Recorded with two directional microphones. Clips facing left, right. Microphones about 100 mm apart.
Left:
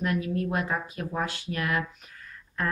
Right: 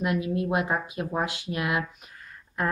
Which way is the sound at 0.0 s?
15° right (ahead or behind).